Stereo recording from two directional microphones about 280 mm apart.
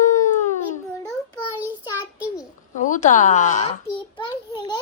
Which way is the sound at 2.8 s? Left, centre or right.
Left.